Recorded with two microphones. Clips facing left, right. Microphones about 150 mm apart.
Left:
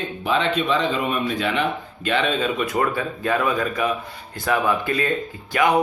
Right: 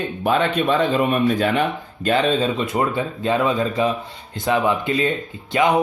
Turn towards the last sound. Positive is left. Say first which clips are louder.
# right 2 dB
turn(degrees=-20)  # may be behind; listen again after turning